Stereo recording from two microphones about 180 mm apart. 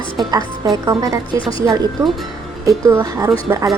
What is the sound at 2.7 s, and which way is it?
Speech, 15° right (ahead or behind).